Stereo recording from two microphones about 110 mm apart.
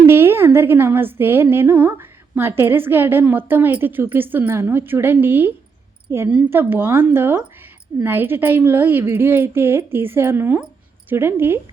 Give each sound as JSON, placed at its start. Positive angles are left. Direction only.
{"t": 0.0, "sound": "a woman's voice", "side_deg": -20}